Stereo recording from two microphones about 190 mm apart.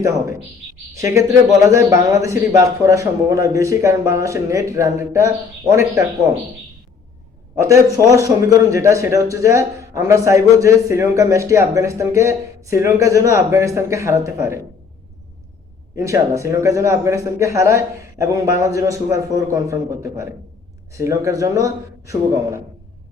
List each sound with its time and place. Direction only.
0.9 s a man's voice: 15° right (ahead or behind)
7.5 s a man's voice: 15° right (ahead or behind)
16.0 s a man's voice: 15° right (ahead or behind)